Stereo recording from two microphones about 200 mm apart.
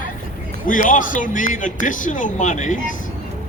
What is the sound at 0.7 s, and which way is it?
A man's voice, 40° left (ahead or behind).